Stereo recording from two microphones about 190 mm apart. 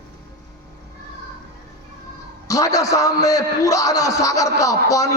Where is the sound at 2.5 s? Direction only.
20° left (ahead or behind).